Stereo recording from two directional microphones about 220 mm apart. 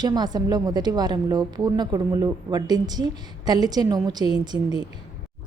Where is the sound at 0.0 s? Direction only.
20° right (ahead or behind).